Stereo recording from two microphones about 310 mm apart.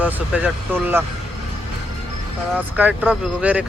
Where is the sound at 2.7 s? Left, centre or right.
Centre.